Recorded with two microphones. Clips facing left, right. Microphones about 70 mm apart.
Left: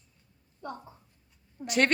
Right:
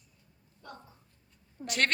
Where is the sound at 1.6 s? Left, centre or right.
Centre.